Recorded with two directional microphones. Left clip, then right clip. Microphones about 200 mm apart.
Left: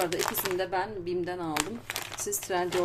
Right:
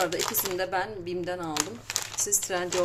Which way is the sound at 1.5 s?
35° left (ahead or behind).